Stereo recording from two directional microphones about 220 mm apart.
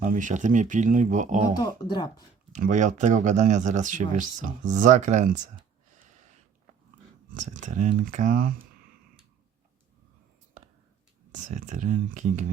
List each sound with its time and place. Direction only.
0.0 s speech: 35° right (ahead or behind)
1.5 s speech: 20° left (ahead or behind)
2.5 s speech: 35° right (ahead or behind)
7.3 s speech: 35° right (ahead or behind)
11.4 s speech: 35° right (ahead or behind)